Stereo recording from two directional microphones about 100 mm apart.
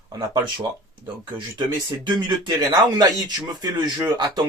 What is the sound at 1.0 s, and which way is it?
Speech, 55° right (ahead or behind).